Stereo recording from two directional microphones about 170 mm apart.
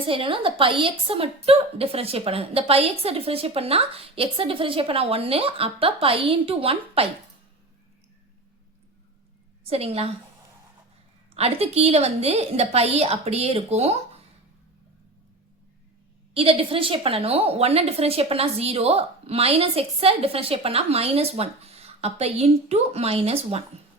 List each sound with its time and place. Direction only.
0.1 s a woman's voice: 30° right (ahead or behind)
9.6 s a woman's voice: 35° right (ahead or behind)
11.3 s a woman's voice: 35° right (ahead or behind)
16.3 s a woman's voice: 35° right (ahead or behind)